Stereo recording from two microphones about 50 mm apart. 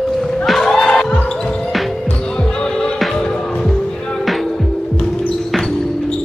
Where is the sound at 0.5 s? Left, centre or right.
Centre.